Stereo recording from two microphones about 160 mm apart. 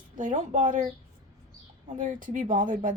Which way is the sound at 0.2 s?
55° right (ahead or behind).